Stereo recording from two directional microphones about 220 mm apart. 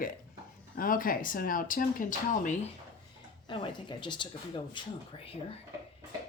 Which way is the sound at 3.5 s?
20° left (ahead or behind).